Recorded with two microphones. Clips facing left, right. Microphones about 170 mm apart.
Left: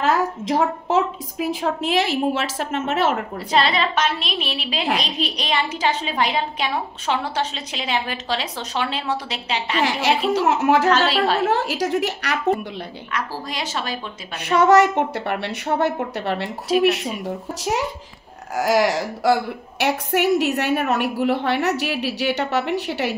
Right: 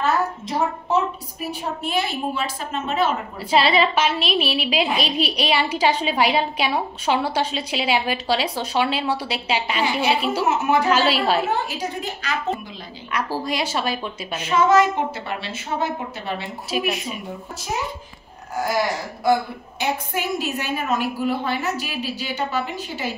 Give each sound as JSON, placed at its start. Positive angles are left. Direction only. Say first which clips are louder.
{"t": 0.0, "sound": "a woman's voice", "louder": "left 2 dB", "side_deg": 90}
{"t": 3.4, "sound": "a woman's voice", "louder": "right 2 dB", "side_deg": -5}
{"t": 9.8, "sound": "a woman's voice", "louder": "left 3 dB", "side_deg": 85}
{"t": 10.9, "sound": "a woman's voice", "louder": "left 1 dB", "side_deg": -5}
{"t": 11.4, "sound": "speech", "louder": "left 4 dB", "side_deg": 90}
{"t": 13.1, "sound": "a woman's voice", "louder": "right 4 dB", "side_deg": -10}
{"t": 14.3, "sound": "a woman's voice", "louder": "left 2 dB", "side_deg": 70}
{"t": 17.6, "sound": "a woman's voice", "louder": "left 4 dB", "side_deg": 75}
{"t": 18.5, "sound": "speech", "louder": "left 4 dB", "side_deg": 90}
{"t": 19.8, "sound": "a woman's voice", "louder": "left 5 dB", "side_deg": 70}